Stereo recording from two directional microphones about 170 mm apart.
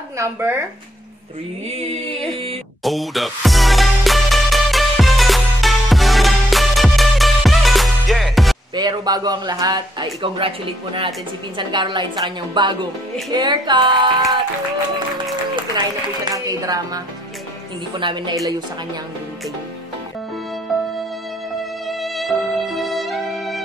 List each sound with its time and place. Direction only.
0.2 s speech: 15° right (ahead or behind)
1.7 s a sound: 40° right (ahead or behind)
2.8 s music: centre (ahead or behind)
8.7 s speech: 25° right (ahead or behind)
11.5 s speech: 25° right (ahead or behind)
16.3 s speech: 20° right (ahead or behind)
20.7 s music: centre (ahead or behind)